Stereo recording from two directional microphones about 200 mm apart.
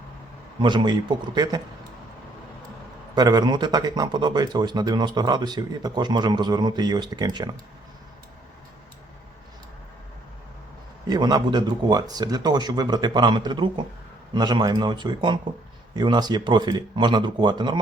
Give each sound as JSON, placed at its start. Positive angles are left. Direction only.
{"t": 0.6, "sound": "speech", "side_deg": -25}
{"t": 3.2, "sound": "speech", "side_deg": -20}
{"t": 11.1, "sound": "speech", "side_deg": -20}